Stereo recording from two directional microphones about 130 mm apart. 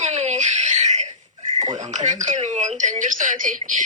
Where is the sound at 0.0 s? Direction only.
60° right (ahead or behind).